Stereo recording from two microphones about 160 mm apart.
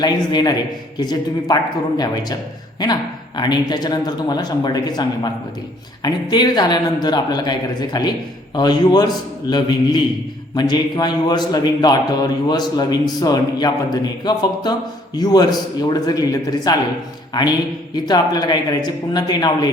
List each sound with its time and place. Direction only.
0.0 s a man's voice: 25° left (ahead or behind)
2.8 s a man's voice: 25° left (ahead or behind)